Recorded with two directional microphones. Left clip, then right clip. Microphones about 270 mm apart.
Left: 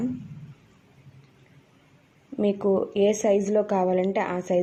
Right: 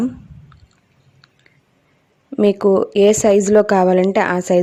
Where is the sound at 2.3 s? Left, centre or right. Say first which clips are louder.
Right 10 dB; right.